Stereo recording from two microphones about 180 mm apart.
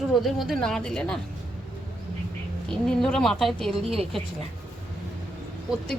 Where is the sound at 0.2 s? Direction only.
Centre (ahead or behind).